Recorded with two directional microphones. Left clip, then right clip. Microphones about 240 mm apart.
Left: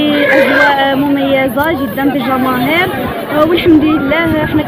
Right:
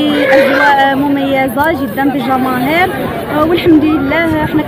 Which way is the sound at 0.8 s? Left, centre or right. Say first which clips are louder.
Right 1 dB; centre.